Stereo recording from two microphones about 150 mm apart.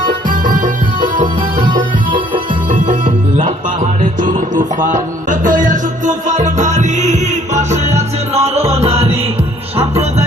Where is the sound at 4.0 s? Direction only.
60° right (ahead or behind).